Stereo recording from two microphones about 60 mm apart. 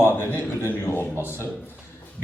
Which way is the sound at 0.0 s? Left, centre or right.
Left.